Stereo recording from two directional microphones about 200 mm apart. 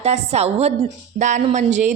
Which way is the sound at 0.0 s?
35° right (ahead or behind).